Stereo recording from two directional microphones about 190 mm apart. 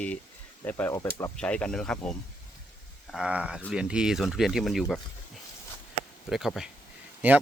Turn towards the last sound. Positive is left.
turn(degrees=-10)  # may be behind; listen again after turning